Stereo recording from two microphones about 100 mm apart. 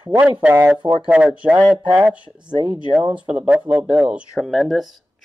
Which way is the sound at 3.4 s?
15° right (ahead or behind).